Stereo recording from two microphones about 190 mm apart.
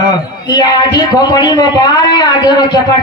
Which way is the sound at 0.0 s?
20° left (ahead or behind).